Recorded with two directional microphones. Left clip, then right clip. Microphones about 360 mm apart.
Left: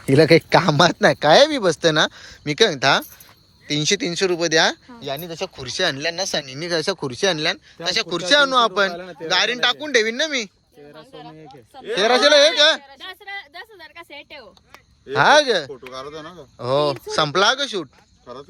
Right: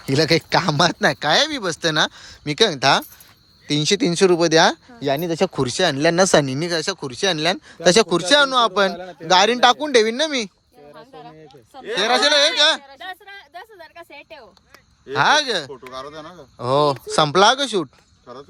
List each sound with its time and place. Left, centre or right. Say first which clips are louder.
0.0 s speech: left 4 dB; centre; by 6.6 s right
6.6 s speech: even; centre
10.9 s a sound: even; centre
11.7 s speech: left 1 dB; right
11.9 s speech: left 2 dB; centre